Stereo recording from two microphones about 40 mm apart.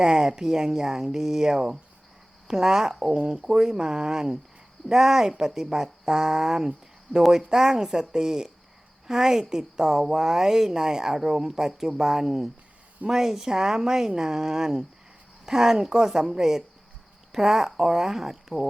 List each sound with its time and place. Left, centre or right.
0.0 s speech: centre